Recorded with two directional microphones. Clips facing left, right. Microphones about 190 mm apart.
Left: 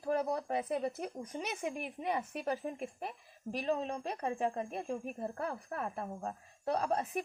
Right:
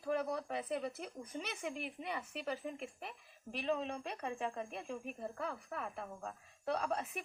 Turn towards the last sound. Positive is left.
turn(degrees=40)  # may be behind; listen again after turning